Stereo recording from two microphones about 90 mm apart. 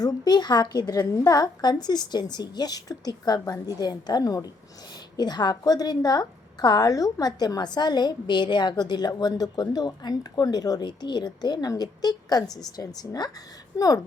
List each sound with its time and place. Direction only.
0.0 s a woman's voice: 50° left (ahead or behind)